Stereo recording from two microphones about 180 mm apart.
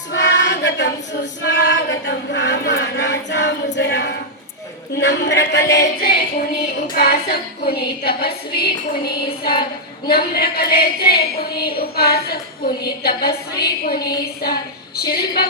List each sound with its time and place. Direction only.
0.1 s choir: 75° left (ahead or behind)
4.9 s a man's voice: 75° left (ahead or behind)
5.7 s a woman's voice: 60° left (ahead or behind)
14.0 s a sound: 20° left (ahead or behind)
14.9 s a woman's voice: 60° left (ahead or behind)